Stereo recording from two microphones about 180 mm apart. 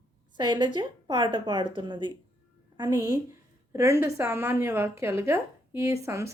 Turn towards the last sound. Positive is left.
turn(degrees=-15)  # may be behind; listen again after turning